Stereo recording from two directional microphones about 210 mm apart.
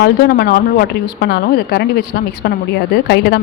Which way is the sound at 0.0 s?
50° left (ahead or behind).